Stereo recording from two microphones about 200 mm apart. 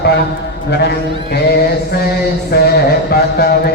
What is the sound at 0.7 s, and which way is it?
Speech, 55° left (ahead or behind).